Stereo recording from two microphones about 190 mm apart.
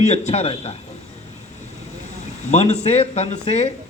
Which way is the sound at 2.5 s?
35° left (ahead or behind).